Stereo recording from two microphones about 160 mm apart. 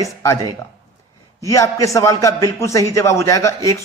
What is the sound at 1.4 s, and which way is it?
A man's voice, 20° left (ahead or behind).